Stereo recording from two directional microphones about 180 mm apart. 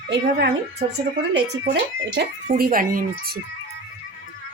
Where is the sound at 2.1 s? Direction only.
55° right (ahead or behind).